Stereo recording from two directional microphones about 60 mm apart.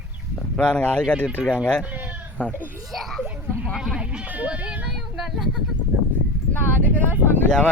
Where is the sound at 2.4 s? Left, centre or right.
Left.